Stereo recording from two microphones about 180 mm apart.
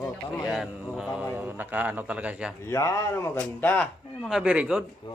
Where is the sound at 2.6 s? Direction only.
15° left (ahead or behind); by 4.8 s 5° right (ahead or behind).